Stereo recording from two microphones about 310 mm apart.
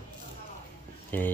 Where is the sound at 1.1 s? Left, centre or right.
Centre.